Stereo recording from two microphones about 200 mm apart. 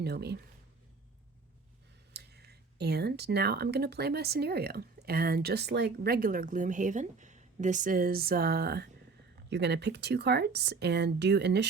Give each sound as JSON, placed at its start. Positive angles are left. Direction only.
{"t": 0.0, "sound": "speech", "side_deg": -55}
{"t": 2.1, "sound": "speech", "side_deg": -55}